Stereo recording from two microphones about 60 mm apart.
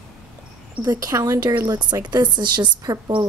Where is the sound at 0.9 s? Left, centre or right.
Right.